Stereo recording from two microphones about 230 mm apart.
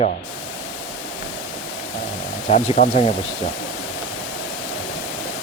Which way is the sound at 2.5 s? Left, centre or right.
Left.